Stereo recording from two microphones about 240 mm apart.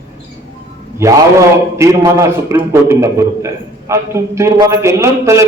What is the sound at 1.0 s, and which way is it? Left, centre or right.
A man's voice, centre.